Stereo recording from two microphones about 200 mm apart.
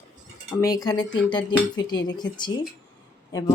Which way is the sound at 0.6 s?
20° left (ahead or behind).